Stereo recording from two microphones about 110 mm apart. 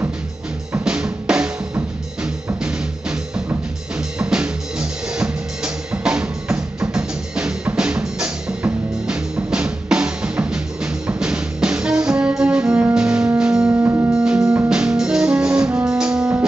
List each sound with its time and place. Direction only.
0.8 s drum kit: 5° right (ahead or behind)
2.6 s music: 10° right (ahead or behind)
13.7 s music: 25° right (ahead or behind)
14.1 s music: 10° right (ahead or behind)